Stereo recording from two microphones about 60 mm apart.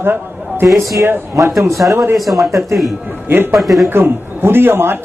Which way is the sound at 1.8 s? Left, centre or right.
Right.